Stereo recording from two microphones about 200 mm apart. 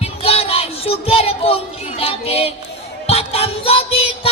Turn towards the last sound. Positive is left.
turn(degrees=30)  # may be behind; listen again after turning